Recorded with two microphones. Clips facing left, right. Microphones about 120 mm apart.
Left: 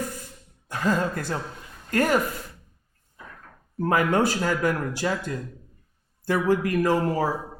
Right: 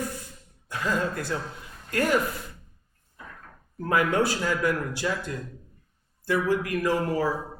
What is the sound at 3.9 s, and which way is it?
Speech, 40° left (ahead or behind).